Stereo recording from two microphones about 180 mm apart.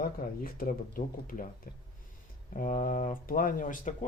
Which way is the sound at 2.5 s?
45° left (ahead or behind).